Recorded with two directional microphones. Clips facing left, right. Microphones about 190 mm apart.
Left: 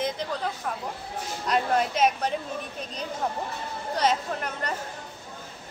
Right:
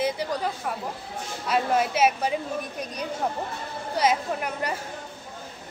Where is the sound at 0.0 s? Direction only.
10° right (ahead or behind).